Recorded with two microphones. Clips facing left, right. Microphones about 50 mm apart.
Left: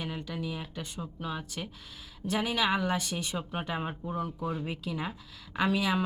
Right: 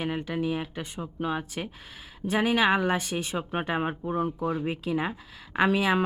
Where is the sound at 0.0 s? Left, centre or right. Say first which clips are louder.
Right 7 dB; right.